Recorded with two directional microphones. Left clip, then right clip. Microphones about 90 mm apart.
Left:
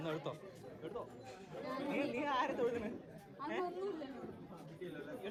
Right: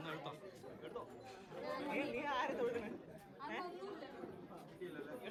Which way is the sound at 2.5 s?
5° right (ahead or behind).